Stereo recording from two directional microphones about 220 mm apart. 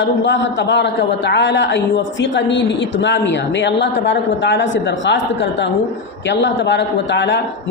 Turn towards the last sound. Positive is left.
turn(degrees=55)  # may be behind; listen again after turning